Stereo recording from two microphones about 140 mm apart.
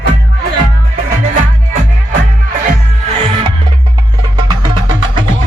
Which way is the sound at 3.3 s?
40° right (ahead or behind).